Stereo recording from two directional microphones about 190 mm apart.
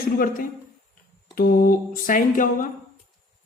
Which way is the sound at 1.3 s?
50° left (ahead or behind).